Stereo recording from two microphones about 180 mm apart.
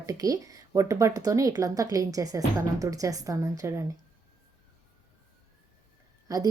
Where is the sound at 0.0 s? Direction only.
20° right (ahead or behind).